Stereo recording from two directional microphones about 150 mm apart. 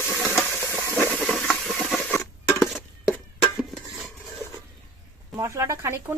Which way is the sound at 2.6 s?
5° right (ahead or behind).